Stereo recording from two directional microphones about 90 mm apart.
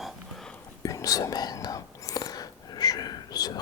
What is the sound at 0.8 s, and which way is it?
Whispering, 40° left (ahead or behind).